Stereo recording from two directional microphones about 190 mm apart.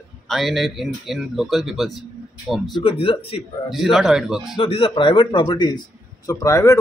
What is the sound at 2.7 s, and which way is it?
Speech, 30° left (ahead or behind).